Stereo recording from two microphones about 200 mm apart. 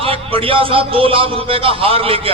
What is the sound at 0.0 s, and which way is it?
A man's voice, 25° right (ahead or behind).